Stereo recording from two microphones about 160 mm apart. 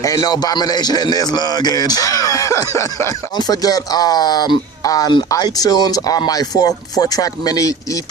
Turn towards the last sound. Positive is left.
turn(degrees=20)  # may be behind; listen again after turning